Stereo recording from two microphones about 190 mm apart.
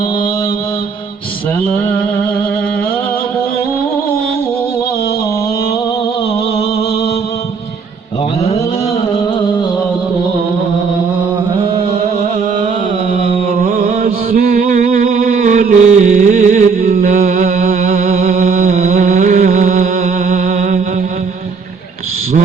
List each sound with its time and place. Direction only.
11.5 s music: 30° right (ahead or behind)
13.1 s carnatic music: 30° right (ahead or behind)
13.6 s music: 45° right (ahead or behind)